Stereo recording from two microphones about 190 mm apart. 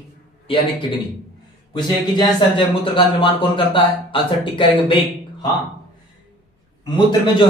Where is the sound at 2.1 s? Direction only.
25° left (ahead or behind).